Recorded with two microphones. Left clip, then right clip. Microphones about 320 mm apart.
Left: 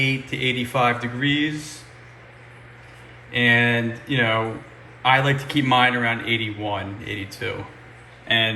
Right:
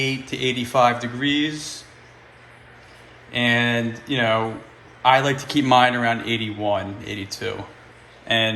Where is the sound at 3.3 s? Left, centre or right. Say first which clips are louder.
Left 2 dB; centre.